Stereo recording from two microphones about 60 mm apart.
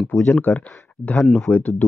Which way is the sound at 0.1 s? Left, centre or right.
Left.